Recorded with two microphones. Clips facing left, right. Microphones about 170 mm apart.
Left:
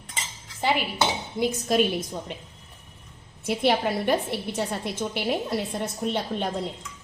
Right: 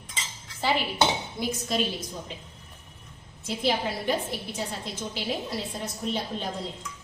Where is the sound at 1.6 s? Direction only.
55° left (ahead or behind).